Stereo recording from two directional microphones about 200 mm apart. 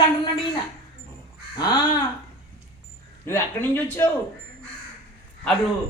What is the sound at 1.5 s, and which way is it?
Speech, 20° left (ahead or behind).